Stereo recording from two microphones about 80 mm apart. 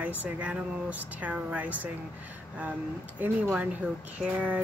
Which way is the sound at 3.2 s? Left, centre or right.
Right.